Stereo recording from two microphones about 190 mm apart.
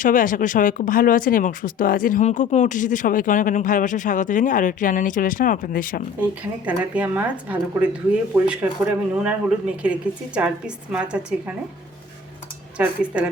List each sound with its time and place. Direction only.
0.0 s speech: 45° left (ahead or behind)
6.7 s a woman's voice: 10° right (ahead or behind)
12.7 s a woman's voice: 5° right (ahead or behind)